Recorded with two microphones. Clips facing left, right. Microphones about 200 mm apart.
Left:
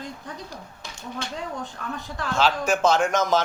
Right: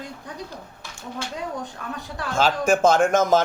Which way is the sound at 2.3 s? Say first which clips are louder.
Right 3 dB; 50° right (ahead or behind).